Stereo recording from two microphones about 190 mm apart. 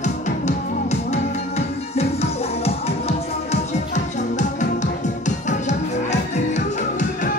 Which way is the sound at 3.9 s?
40° left (ahead or behind).